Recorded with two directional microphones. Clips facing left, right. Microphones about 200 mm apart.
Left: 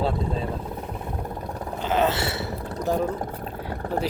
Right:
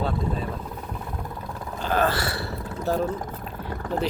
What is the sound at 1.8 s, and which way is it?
Burping, 20° left (ahead or behind).